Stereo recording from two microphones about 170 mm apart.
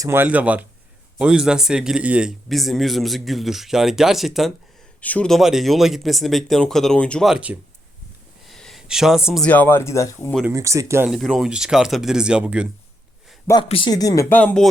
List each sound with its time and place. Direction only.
0.0 s speech: 15° right (ahead or behind)
8.4 s a sound: centre (ahead or behind)
9.5 s speech: 10° left (ahead or behind)
10.5 s speech: 20° right (ahead or behind)
11.1 s speech: centre (ahead or behind)
13.7 s speech: 30° left (ahead or behind); by 14.7 s 5° left (ahead or behind)